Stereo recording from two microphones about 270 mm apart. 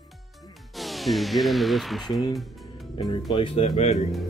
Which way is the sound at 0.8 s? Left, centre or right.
Centre.